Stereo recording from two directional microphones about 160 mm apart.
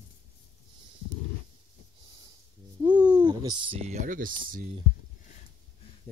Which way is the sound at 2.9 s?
10° right (ahead or behind).